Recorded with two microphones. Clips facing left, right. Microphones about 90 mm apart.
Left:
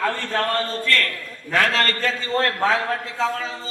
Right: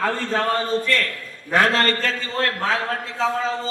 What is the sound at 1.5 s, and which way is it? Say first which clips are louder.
Speech: right 2 dB; 25° right (ahead or behind).